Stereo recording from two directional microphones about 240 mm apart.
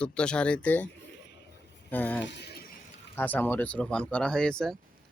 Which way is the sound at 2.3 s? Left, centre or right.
Left.